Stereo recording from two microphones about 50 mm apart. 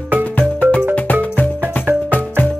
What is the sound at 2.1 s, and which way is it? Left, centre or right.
Music, left.